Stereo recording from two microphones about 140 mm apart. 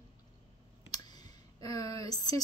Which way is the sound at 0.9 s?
30° left (ahead or behind).